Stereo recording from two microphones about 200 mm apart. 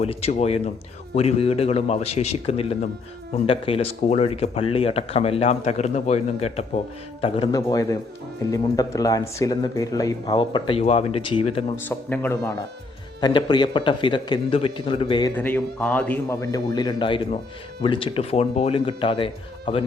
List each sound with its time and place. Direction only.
0.0 s speech: 30° left (ahead or behind)
11.9 s a man's voice: 10° left (ahead or behind); by 15.3 s 25° left (ahead or behind)
15.4 s a man's voice: 10° left (ahead or behind); by 19.8 s 25° left (ahead or behind)